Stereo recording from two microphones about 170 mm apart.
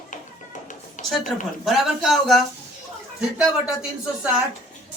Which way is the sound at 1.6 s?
Centre (ahead or behind).